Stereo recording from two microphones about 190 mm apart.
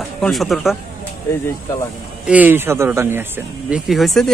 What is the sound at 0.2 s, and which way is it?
Speech, centre (ahead or behind).